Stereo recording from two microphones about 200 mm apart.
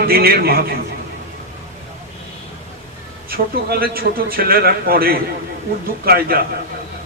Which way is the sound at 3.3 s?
50° right (ahead or behind).